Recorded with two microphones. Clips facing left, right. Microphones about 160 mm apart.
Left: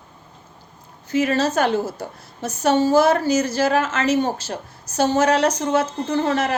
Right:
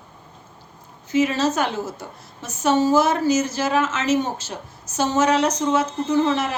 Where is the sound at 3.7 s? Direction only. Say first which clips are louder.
Left 2 dB; 55° left (ahead or behind).